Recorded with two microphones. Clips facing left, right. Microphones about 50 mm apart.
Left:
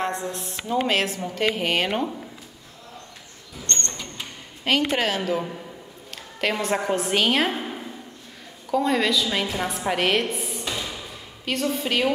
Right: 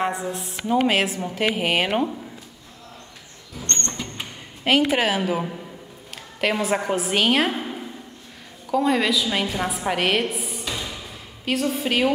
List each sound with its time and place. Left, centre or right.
0.0 s a woman's voice: centre
3.6 s a sound: right
4.6 s a woman's voice: centre